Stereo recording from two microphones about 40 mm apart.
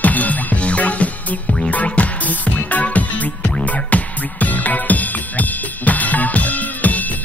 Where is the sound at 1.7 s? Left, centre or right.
Left.